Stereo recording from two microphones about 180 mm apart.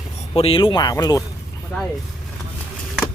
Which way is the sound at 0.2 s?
35° left (ahead or behind).